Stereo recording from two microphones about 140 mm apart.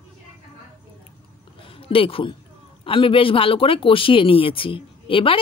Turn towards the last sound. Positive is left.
turn(degrees=40)  # may be behind; listen again after turning